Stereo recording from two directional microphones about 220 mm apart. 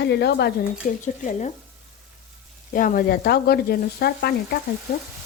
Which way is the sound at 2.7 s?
40° left (ahead or behind).